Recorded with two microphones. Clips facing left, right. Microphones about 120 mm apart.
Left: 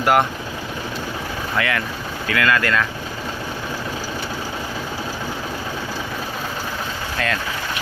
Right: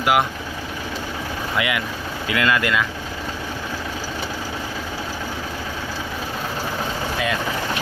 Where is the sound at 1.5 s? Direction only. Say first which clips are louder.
Left 1 dB; 15° right (ahead or behind).